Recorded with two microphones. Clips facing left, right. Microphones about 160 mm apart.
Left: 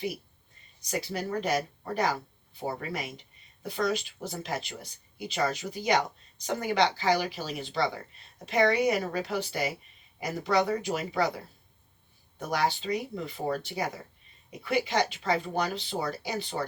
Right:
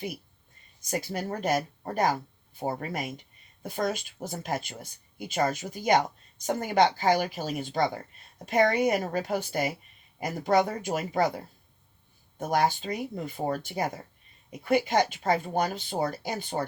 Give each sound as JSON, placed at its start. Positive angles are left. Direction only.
{"t": 0.8, "sound": "speech", "side_deg": -50}
{"t": 12.4, "sound": "speech", "side_deg": -50}